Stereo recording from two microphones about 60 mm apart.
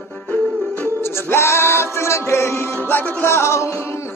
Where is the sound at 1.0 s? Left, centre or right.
Left.